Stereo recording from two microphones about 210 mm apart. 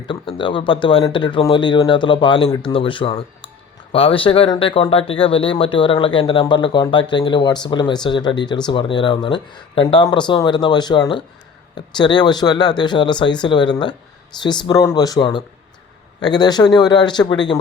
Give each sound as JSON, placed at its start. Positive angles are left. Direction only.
{"t": 0.1, "sound": "speech", "side_deg": 25}